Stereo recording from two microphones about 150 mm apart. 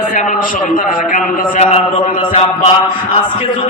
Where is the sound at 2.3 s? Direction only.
40° left (ahead or behind).